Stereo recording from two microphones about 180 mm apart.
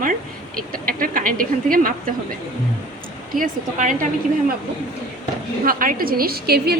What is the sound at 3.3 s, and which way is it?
Speech, 50° right (ahead or behind).